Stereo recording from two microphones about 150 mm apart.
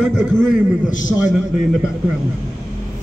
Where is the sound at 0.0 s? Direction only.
Centre (ahead or behind).